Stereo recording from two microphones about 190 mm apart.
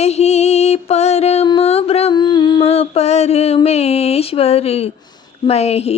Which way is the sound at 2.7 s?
35° left (ahead or behind).